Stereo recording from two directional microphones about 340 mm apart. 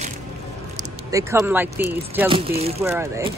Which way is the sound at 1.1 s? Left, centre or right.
Centre.